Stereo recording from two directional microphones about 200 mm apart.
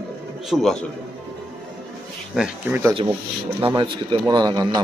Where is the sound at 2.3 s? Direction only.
5° right (ahead or behind).